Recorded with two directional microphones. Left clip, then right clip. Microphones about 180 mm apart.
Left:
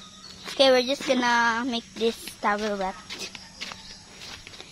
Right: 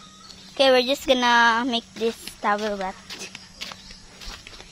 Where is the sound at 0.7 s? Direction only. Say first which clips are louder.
Right 5 dB; 25° right (ahead or behind).